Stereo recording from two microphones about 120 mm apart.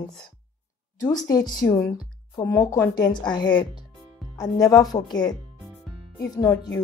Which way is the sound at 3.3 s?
40° left (ahead or behind).